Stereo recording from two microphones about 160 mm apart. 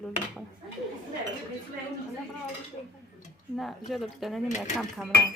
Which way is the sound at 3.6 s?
Centre (ahead or behind).